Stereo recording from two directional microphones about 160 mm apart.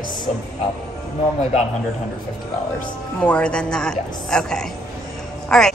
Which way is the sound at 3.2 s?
5° left (ahead or behind).